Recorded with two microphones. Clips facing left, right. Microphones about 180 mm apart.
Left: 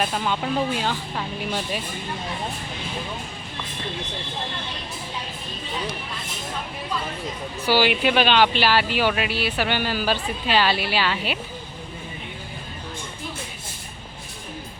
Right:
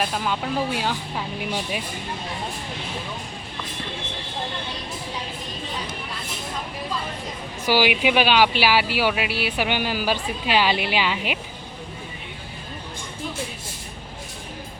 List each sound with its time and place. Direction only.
0.0 s speech: centre (ahead or behind)
7.7 s speech: 10° right (ahead or behind)